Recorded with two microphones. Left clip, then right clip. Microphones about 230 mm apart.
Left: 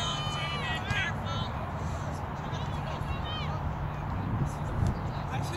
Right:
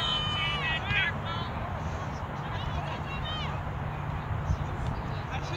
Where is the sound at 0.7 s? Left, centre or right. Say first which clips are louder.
Right 2 dB; centre.